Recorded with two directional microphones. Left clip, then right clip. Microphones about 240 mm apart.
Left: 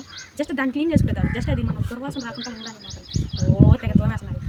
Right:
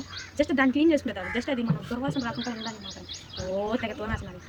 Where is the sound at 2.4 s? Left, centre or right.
Left.